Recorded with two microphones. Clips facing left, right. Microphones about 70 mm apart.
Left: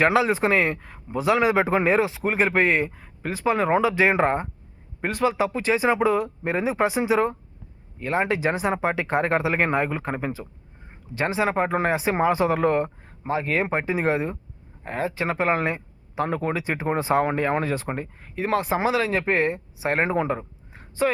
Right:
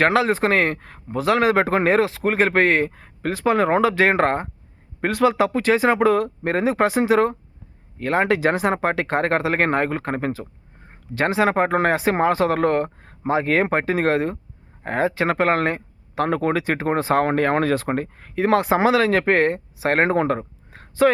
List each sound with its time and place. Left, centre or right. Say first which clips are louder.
0.0 s speech: right 2 dB; right
4.9 s speech: right 4 dB; right
7.9 s speech: right 4 dB; right
14.8 s speech: right 5 dB; right
20.7 s a sound: right 6 dB; right